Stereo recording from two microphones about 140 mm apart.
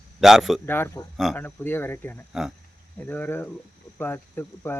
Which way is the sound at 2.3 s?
5° right (ahead or behind).